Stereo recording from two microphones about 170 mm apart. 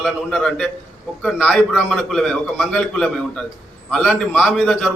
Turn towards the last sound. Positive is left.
turn(degrees=5)  # may be behind; listen again after turning